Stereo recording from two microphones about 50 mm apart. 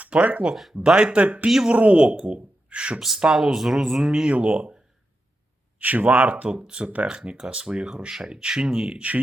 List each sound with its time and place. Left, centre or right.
0.0 s speech: right
0.5 s speech: centre
0.8 s speech: centre
1.2 s speech: right
1.5 s speech: centre
1.7 s speech: right
3.0 s speech: centre
4.3 s speech: right
5.8 s speech: right; by 9.0 s centre
9.0 s speech: right